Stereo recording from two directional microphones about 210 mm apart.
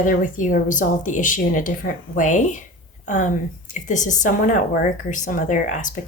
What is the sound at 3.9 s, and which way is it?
A woman's voice, 35° left (ahead or behind).